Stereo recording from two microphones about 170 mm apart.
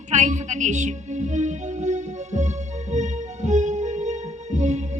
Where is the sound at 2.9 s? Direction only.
45° right (ahead or behind).